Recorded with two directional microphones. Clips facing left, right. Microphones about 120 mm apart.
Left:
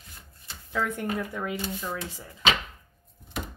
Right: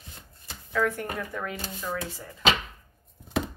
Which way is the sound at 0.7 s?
15° left (ahead or behind).